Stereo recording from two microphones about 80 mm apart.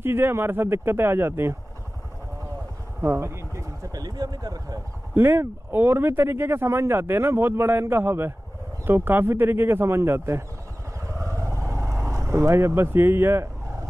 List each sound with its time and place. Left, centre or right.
0.0 s speech: right
3.0 s a sound: right
3.9 s speech: right
5.1 s speech: right
11.1 s vehicle: right
12.0 s speech: right